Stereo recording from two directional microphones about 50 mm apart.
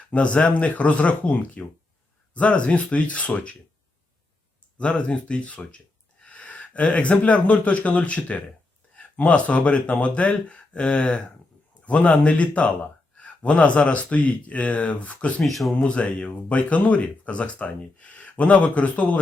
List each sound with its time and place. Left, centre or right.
0.1 s speech: left
4.8 s speech: left
15.4 s speech: centre
15.8 s speech: left